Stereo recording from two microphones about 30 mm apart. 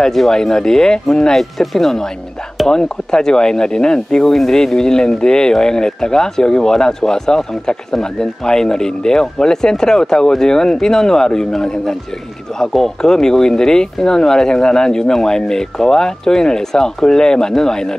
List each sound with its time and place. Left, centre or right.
0.3 s speech: centre
1.3 s speech: centre
2.7 s speech: left